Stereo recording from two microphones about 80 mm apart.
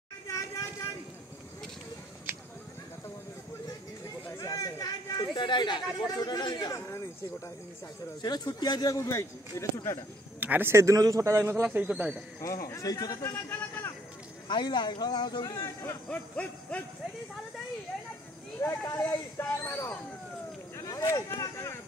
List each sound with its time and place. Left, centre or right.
4.3 s a sound: left
6.0 s speech: left
8.2 s speech: left
10.4 s speech: right
10.7 s a man's voice: right
11.6 s speech: centre
12.4 s speech: left
13.2 s a man's voice: left
14.5 s speech: left
15.6 s speech: left
16.1 s a sound: centre
18.6 s speech: left